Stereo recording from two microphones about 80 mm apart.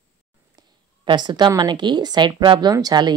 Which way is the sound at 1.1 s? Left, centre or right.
Right.